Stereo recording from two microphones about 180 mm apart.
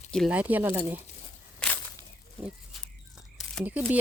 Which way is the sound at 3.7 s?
10° right (ahead or behind).